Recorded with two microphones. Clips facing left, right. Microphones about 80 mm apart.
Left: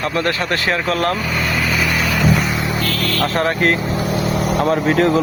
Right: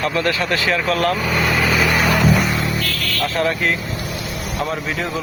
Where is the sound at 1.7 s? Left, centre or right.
Right.